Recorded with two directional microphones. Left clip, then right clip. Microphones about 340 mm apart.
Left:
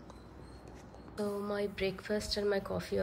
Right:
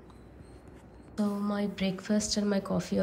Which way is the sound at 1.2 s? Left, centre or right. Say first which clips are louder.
Right 2 dB; centre.